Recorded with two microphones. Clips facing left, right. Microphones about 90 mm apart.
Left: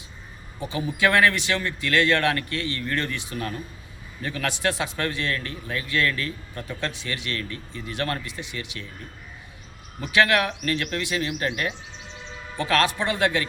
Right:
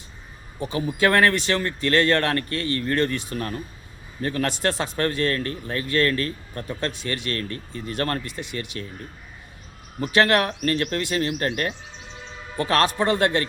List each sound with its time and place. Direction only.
0.9 s a man's voice: 40° right (ahead or behind)
10.0 s a man's voice: 40° right (ahead or behind)